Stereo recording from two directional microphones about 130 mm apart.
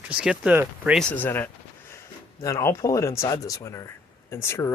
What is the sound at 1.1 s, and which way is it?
Speech, 15° left (ahead or behind).